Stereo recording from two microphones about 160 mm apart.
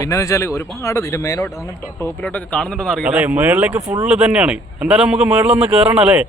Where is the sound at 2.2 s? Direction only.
5° left (ahead or behind); by 6.2 s 10° right (ahead or behind).